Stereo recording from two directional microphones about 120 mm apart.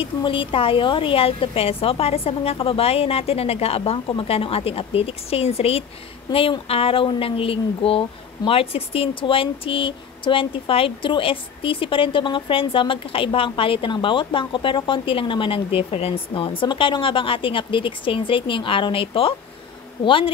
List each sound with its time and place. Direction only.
0.0 s a woman's voice: 45° left (ahead or behind)